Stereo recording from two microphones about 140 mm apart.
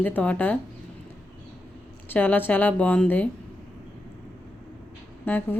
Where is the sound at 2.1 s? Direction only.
15° left (ahead or behind).